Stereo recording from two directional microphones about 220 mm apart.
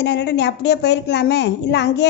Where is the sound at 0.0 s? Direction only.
50° left (ahead or behind).